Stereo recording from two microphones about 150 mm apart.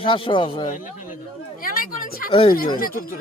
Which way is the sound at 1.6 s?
70° left (ahead or behind).